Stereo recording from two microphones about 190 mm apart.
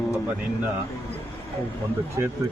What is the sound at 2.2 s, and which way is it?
Speech, 15° right (ahead or behind).